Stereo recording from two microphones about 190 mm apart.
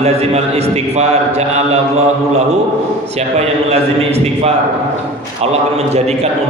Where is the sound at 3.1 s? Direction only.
35° right (ahead or behind).